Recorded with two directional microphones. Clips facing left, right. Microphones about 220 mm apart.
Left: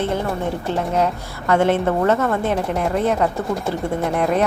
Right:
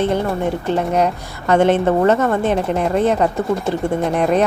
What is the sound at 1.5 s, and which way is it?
A woman's voice, 20° right (ahead or behind).